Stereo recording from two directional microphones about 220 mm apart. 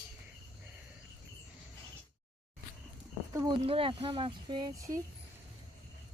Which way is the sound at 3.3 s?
20° right (ahead or behind).